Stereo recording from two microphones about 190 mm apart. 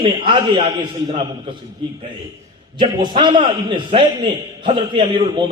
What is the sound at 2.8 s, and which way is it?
A man's voice, 25° right (ahead or behind).